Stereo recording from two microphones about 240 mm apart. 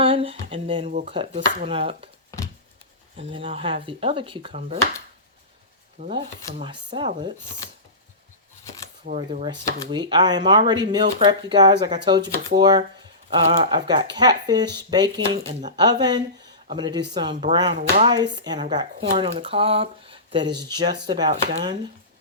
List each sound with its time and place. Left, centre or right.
0.0 s a sound: right
1.0 s speech: right
3.2 s speech: right
6.0 s speech: right
9.1 s speech: right